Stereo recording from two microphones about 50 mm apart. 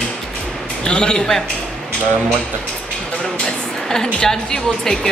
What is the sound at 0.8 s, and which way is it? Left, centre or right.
Speech, centre.